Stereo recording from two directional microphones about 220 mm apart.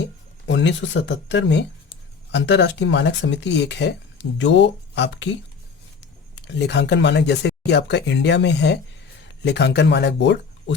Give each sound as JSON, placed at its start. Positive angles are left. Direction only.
{"t": 0.4, "sound": "speech", "side_deg": 55}
{"t": 6.3, "sound": "speech", "side_deg": 50}